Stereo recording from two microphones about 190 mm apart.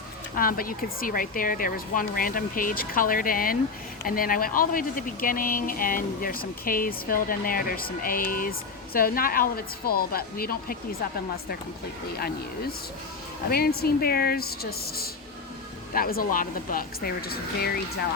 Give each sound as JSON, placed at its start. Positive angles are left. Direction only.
{"t": 0.3, "sound": "speech", "side_deg": 50}
{"t": 12.1, "sound": "speech", "side_deg": 55}